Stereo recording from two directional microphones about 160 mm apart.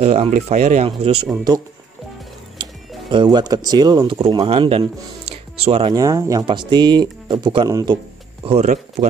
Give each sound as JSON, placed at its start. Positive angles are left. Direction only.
{"t": 0.0, "sound": "speech", "side_deg": -35}
{"t": 0.3, "sound": "speech", "side_deg": -45}
{"t": 3.1, "sound": "speech", "side_deg": -30}
{"t": 8.5, "sound": "speech", "side_deg": -45}